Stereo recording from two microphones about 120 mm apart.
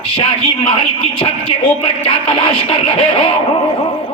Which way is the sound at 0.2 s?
45° left (ahead or behind).